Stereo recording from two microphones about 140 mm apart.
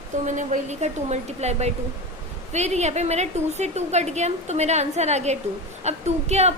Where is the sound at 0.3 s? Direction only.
60° right (ahead or behind).